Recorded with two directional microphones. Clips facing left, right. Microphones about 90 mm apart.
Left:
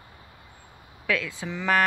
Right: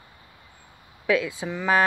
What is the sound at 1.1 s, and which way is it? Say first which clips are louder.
Speech: right 5 dB; 15° right (ahead or behind).